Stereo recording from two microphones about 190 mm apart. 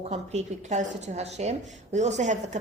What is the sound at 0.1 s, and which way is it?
Speech, 35° right (ahead or behind).